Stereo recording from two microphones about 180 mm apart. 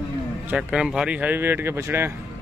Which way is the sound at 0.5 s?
5° right (ahead or behind).